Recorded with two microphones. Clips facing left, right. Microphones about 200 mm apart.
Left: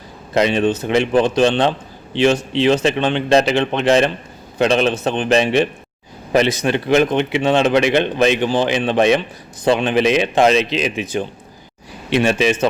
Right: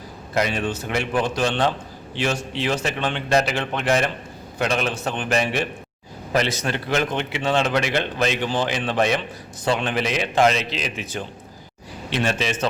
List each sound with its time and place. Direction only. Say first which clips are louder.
0.3 s a man's voice: left 8 dB; 25° left (ahead or behind)